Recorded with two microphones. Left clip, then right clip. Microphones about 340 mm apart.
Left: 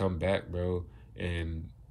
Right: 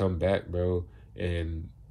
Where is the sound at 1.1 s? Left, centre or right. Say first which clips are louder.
Right 4 dB; right.